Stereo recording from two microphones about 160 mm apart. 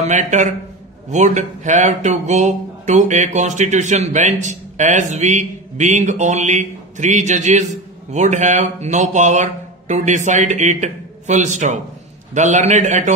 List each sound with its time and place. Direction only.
0.0 s speech: 45° right (ahead or behind)